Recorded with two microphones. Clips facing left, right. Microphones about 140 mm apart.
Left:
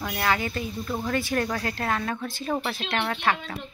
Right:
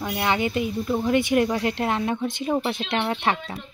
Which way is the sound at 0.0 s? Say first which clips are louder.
Right 3 dB; 20° right (ahead or behind).